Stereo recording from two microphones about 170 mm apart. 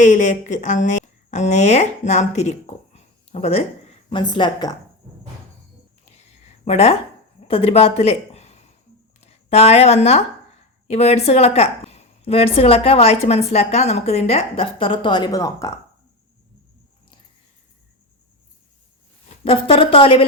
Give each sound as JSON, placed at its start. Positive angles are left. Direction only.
{"t": 0.0, "sound": "a woman's voice", "side_deg": 45}
{"t": 6.7, "sound": "a woman's voice", "side_deg": 35}
{"t": 19.5, "sound": "a woman's voice", "side_deg": 30}